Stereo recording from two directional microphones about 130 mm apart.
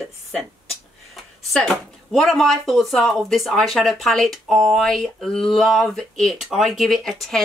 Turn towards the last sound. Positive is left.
turn(degrees=0)  # may be behind; listen again after turning